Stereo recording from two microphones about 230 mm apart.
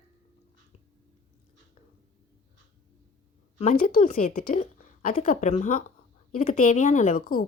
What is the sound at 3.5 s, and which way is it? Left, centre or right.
Speech, left.